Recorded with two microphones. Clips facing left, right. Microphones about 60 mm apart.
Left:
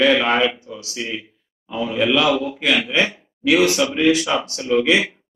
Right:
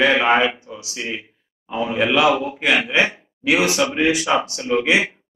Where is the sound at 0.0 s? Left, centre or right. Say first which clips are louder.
Even; right.